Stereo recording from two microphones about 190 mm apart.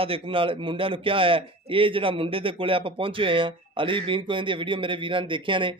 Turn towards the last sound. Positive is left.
turn(degrees=-25)  # may be behind; listen again after turning